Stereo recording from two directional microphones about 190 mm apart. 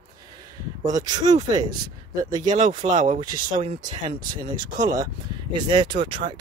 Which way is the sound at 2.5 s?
40° right (ahead or behind).